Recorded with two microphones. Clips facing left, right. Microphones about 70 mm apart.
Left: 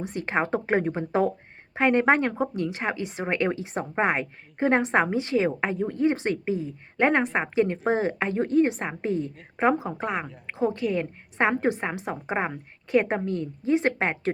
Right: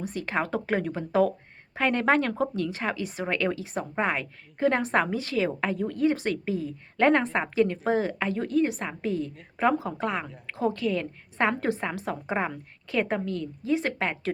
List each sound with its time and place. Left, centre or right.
0.0 s speech: left
7.4 s speech: left